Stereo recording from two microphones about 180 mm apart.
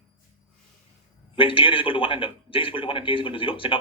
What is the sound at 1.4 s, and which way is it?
A man's voice, 30° left (ahead or behind).